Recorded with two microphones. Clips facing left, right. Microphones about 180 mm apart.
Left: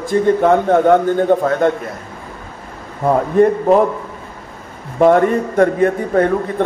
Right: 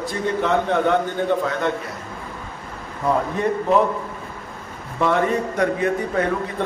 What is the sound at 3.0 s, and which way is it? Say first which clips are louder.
Speech: left 8 dB; 50° left (ahead or behind).